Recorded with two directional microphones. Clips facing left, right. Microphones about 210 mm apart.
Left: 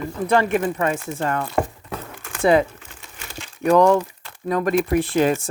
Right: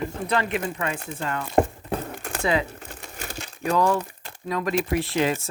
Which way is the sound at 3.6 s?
55° left (ahead or behind).